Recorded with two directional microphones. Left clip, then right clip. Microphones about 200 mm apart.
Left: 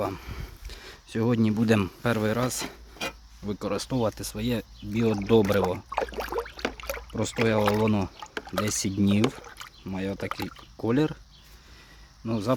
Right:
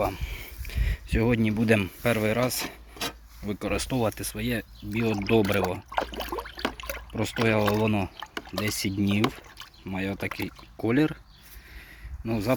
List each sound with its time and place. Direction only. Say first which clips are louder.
0.2 s a sound: right 3 dB; 20° left (ahead or behind)
1.4 s speech: even; 15° left (ahead or behind)
6.1 s a sound: left 2 dB; centre (ahead or behind)
7.2 s speech: even; 10° left (ahead or behind)
9.8 s speech: right 1 dB; 5° left (ahead or behind)
12.2 s speech: even; 10° left (ahead or behind)